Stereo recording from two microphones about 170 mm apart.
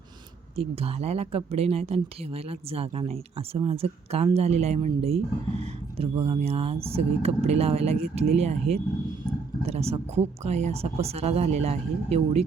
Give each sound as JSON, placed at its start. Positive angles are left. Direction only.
{"t": 0.5, "sound": "speech", "side_deg": -35}